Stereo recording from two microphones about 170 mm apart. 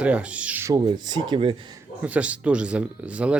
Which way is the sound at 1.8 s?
10° right (ahead or behind).